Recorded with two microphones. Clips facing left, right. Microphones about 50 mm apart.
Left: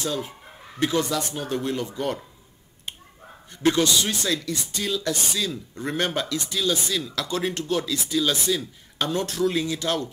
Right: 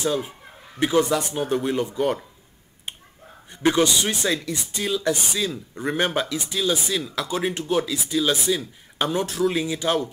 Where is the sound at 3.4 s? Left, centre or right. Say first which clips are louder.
Right 1 dB; centre.